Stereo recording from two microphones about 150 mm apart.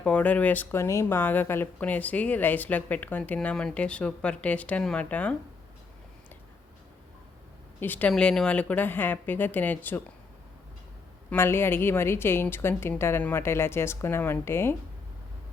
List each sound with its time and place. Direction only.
0.0 s speech: 10° left (ahead or behind)
7.8 s speech: 10° left (ahead or behind)
11.3 s speech: 15° left (ahead or behind)